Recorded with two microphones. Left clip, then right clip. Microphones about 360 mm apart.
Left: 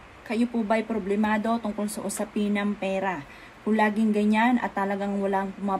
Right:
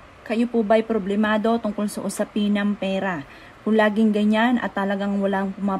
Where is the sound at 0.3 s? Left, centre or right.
Right.